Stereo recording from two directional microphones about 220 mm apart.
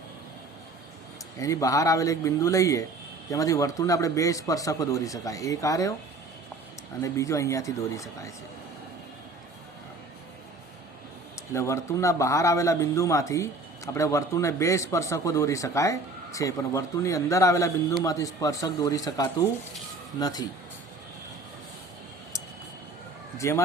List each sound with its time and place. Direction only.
1.4 s a man's voice: 15° left (ahead or behind)
7.0 s a man's voice: 15° left (ahead or behind)
11.5 s a man's voice: 15° left (ahead or behind)
23.4 s a man's voice: 15° left (ahead or behind)